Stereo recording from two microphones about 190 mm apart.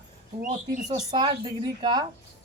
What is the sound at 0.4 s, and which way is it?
Speech, 40° right (ahead or behind).